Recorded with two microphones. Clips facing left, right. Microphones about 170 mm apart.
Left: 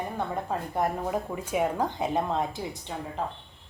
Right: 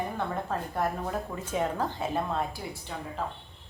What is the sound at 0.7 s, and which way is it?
Speech, 15° left (ahead or behind).